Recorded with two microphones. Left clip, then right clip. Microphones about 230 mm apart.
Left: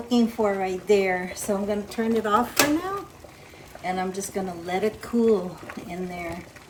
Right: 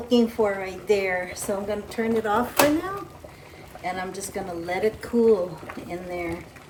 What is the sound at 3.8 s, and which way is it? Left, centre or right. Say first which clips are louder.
Speech: left 2 dB; left.